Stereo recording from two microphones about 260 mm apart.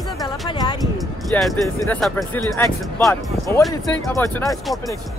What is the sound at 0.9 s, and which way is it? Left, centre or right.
Speech, centre.